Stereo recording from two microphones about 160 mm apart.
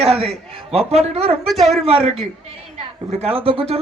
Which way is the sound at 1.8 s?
40° right (ahead or behind).